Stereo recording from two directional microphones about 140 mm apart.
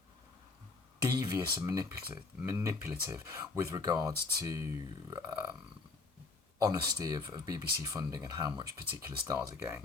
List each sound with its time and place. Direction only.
1.1 s speech: 25° right (ahead or behind)
6.6 s speech: 25° right (ahead or behind)
9.0 s speech: 20° right (ahead or behind)